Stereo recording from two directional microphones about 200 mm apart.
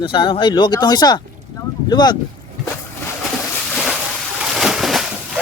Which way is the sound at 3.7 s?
Centre (ahead or behind).